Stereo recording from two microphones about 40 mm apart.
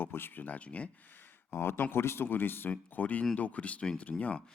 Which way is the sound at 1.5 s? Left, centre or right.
Left.